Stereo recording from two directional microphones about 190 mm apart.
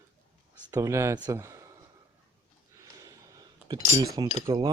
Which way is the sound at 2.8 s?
20° right (ahead or behind).